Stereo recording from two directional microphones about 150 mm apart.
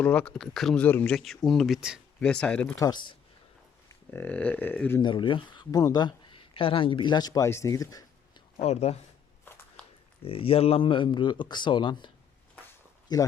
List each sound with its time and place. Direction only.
0.0 s speech: 10° left (ahead or behind)
2.7 s speech: 25° left (ahead or behind)
4.1 s speech: 10° left (ahead or behind)
4.9 s speech: 30° left (ahead or behind)
8.6 s speech: 45° left (ahead or behind)
9.8 s a sound: 5° left (ahead or behind)
10.2 s speech: 40° left (ahead or behind)